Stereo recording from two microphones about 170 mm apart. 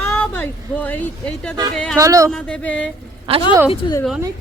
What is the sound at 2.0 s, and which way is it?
Speech, 20° right (ahead or behind).